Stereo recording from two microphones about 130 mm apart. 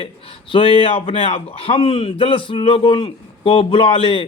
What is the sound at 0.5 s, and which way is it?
A man's voice, 40° left (ahead or behind).